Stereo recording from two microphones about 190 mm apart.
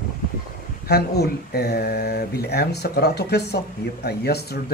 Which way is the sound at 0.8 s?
55° left (ahead or behind).